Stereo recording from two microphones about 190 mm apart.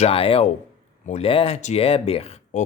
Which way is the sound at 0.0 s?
30° left (ahead or behind).